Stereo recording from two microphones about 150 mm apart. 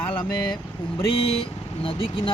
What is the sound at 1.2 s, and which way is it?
Speech, 40° left (ahead or behind).